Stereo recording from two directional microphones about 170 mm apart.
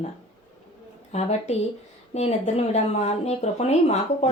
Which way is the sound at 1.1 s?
40° left (ahead or behind).